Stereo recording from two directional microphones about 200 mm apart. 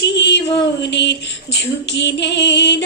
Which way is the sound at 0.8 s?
60° left (ahead or behind).